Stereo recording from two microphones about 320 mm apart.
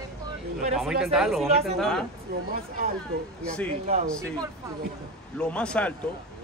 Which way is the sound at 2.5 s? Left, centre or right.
Right.